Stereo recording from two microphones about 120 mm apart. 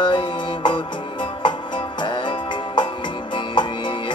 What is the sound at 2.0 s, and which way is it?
Music, 40° left (ahead or behind).